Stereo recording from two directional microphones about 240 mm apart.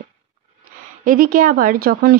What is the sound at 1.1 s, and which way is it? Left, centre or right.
Speech, right.